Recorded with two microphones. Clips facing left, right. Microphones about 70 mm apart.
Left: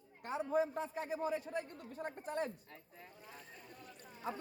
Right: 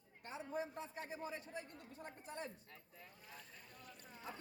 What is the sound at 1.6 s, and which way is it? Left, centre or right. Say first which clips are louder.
Speech: left 8 dB; left.